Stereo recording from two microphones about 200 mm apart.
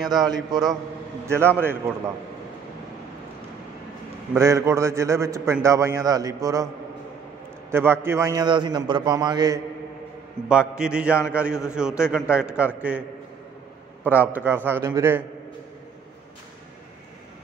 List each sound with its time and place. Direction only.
0.1 s a man's voice: 20° right (ahead or behind)
4.3 s a man's voice: 15° right (ahead or behind)
7.7 s a man's voice: 10° right (ahead or behind)
10.4 s a man's voice: 30° right (ahead or behind)
10.8 s a man's voice: 5° right (ahead or behind)
14.2 s a man's voice: 10° right (ahead or behind)